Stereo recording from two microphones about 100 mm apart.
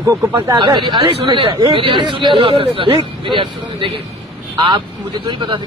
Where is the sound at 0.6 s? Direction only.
50° right (ahead or behind).